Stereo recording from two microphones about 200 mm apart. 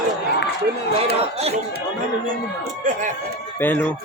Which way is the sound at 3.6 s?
10° left (ahead or behind).